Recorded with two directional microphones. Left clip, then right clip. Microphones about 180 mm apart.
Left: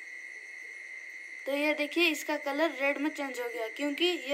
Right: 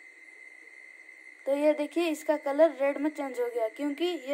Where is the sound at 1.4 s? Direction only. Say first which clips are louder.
Right 4 dB; 65° right (ahead or behind).